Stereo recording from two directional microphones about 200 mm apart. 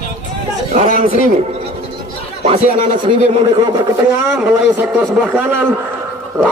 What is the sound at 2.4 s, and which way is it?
Speech, 35° right (ahead or behind).